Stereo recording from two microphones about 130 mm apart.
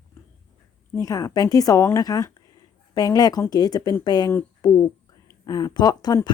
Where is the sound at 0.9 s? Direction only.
30° left (ahead or behind).